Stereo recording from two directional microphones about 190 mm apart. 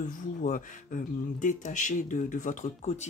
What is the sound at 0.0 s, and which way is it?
Speech, 40° left (ahead or behind).